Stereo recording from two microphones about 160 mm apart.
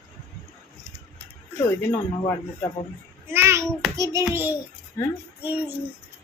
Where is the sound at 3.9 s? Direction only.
20° right (ahead or behind).